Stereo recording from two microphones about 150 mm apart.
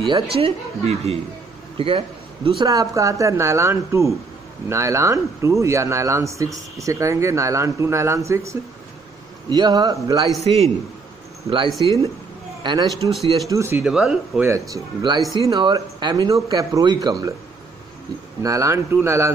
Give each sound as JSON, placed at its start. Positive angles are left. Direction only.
{"t": 0.0, "sound": "a woman's voice", "side_deg": -35}
{"t": 2.6, "sound": "speech", "side_deg": -25}
{"t": 11.8, "sound": "a woman's voice", "side_deg": -35}
{"t": 13.1, "sound": "speech", "side_deg": 0}
{"t": 13.5, "sound": "speech", "side_deg": -15}
{"t": 13.8, "sound": "speech", "side_deg": -5}
{"t": 14.7, "sound": "speech", "side_deg": -25}
{"t": 18.4, "sound": "speech", "side_deg": -20}